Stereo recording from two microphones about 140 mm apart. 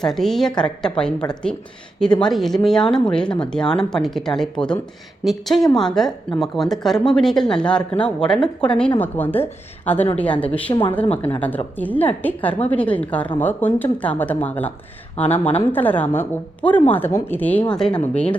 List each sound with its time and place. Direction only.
0.0 s a woman's voice: centre (ahead or behind)